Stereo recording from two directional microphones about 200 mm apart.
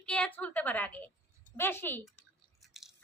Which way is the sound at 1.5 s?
10° left (ahead or behind).